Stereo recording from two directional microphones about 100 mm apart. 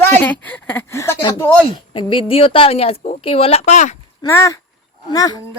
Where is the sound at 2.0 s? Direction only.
60° left (ahead or behind); by 3.7 s 85° left.